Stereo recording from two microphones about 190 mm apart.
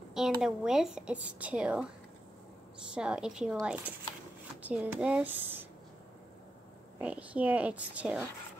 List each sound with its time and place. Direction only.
0.1 s a woman's voice: 5° right (ahead or behind)
2.9 s a woman's voice: 5° right (ahead or behind)
7.0 s a woman's voice: 5° right (ahead or behind)